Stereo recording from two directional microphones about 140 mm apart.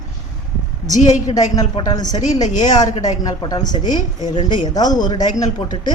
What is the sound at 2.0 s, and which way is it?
Speech, 30° left (ahead or behind).